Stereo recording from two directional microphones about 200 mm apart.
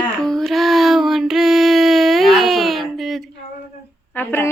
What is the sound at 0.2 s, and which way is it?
Child singing, centre (ahead or behind).